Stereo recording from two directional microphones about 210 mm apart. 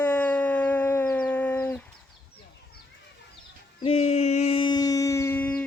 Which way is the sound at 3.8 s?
30° left (ahead or behind).